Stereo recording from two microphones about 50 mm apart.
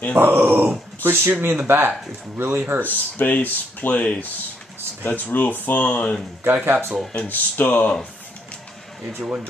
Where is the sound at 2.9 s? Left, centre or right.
Left.